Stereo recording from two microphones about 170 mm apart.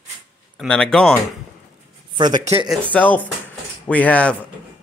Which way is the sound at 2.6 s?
5° right (ahead or behind).